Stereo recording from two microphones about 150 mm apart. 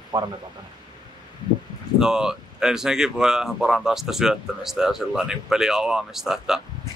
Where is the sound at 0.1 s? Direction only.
30° right (ahead or behind).